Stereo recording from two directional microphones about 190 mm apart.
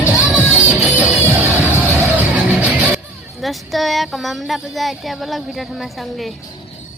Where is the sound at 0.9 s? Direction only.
10° right (ahead or behind).